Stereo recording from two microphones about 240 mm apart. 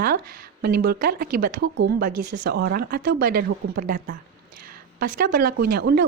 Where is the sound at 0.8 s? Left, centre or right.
Right.